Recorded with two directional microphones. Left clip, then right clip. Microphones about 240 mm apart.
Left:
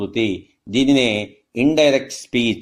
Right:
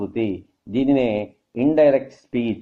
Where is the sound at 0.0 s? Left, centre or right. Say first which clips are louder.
Left 3 dB; left.